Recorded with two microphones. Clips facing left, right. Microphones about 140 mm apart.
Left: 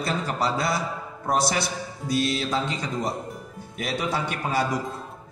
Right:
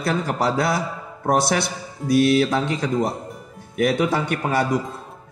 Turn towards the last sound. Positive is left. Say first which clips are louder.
# right 4 dB
turn(degrees=-60)  # may be behind; listen again after turning